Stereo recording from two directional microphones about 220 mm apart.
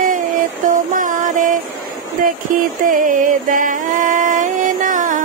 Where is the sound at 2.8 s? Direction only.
40° right (ahead or behind).